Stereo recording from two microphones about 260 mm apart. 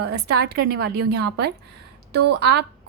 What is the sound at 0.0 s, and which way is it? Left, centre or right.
A woman's voice, right.